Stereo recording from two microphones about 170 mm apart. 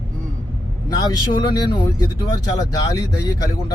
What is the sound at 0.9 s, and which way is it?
A man's voice, 25° left (ahead or behind).